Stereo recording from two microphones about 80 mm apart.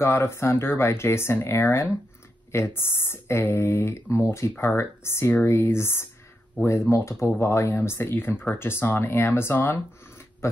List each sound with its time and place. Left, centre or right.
0.0 s speech: left